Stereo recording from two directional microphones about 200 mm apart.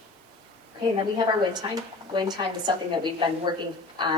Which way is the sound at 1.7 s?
20° right (ahead or behind).